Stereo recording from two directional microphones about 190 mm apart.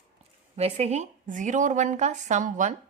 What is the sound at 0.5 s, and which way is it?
A woman's voice, 35° right (ahead or behind).